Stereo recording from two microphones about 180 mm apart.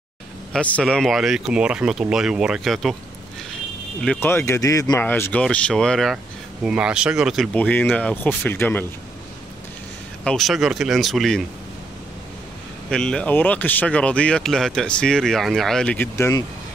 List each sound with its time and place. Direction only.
0.5 s speech: 5° left (ahead or behind)
4.0 s speech: 10° left (ahead or behind)
7.5 s speech: 10° left (ahead or behind)
10.2 s speech: centre (ahead or behind)
12.9 s speech: 5° left (ahead or behind)